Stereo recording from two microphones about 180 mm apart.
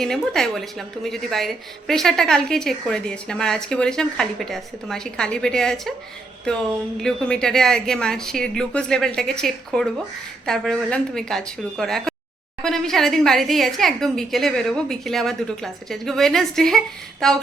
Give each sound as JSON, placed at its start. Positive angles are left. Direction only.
{"t": 0.0, "sound": "a woman's voice", "side_deg": 0}
{"t": 7.0, "sound": "a woman's voice", "side_deg": 5}